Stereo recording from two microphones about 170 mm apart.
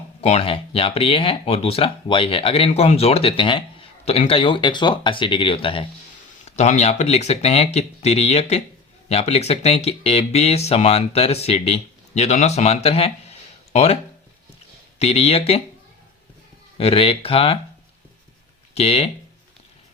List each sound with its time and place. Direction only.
0.2 s speech: 35° left (ahead or behind)
6.4 s speech: 40° left (ahead or behind)
16.7 s speech: 35° left (ahead or behind)
18.7 s speech: 35° left (ahead or behind)